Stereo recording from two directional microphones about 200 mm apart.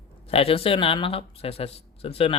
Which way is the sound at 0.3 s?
30° left (ahead or behind).